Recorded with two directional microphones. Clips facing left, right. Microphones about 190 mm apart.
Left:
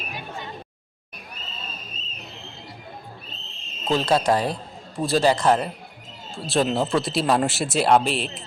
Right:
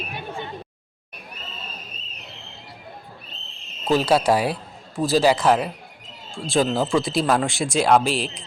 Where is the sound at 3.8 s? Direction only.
5° right (ahead or behind).